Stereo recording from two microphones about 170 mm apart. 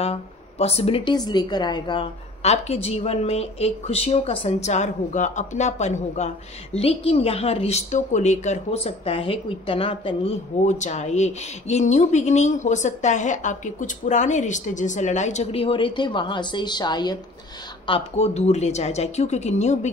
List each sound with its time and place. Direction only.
0.0 s speech: 40° left (ahead or behind)
1.1 s a woman's voice: 25° left (ahead or behind)
2.4 s speech: 40° left (ahead or behind)
10.6 s speech: 45° left (ahead or behind); by 17.2 s 25° left (ahead or behind)
17.8 s speech: 35° left (ahead or behind)